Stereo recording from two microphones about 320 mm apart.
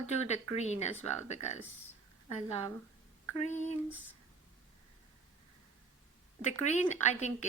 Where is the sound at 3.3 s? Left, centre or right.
Left.